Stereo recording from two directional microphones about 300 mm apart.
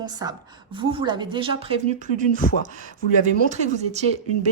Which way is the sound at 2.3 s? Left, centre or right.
Left.